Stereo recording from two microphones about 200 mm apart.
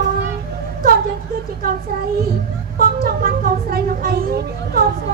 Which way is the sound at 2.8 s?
45° right (ahead or behind).